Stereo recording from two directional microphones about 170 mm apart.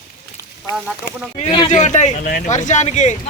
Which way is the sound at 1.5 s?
25° left (ahead or behind).